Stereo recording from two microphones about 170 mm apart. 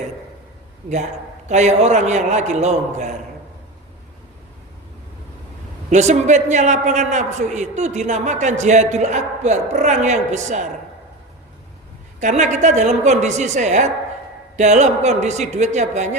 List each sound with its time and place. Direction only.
1.5 s a man's voice: 45° right (ahead or behind)
5.9 s a man's voice: 45° right (ahead or behind)
12.2 s a man's voice: 45° right (ahead or behind)